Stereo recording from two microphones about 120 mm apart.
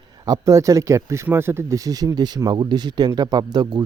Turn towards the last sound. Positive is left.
turn(degrees=-35)  # may be behind; listen again after turning